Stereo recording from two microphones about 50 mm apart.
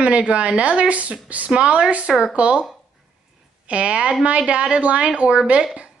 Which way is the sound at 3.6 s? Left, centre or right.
Right.